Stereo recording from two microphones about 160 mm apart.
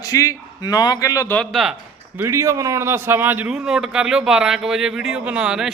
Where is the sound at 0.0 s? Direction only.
20° left (ahead or behind).